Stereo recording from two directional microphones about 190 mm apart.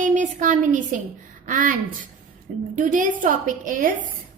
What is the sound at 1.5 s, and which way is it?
Speech, 45° right (ahead or behind).